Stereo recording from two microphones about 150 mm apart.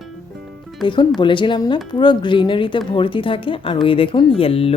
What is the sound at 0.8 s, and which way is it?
Speech, 30° left (ahead or behind).